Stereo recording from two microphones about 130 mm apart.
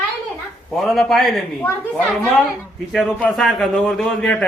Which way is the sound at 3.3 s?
Centre (ahead or behind).